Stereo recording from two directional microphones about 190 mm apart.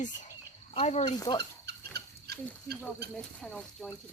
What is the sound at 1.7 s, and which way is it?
Rodents, 60° right (ahead or behind).